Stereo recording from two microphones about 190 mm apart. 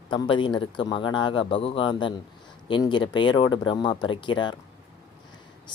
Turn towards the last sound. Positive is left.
turn(degrees=25)  # may be behind; listen again after turning